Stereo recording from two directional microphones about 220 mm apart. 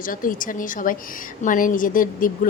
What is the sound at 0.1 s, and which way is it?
A woman's voice, 40° left (ahead or behind).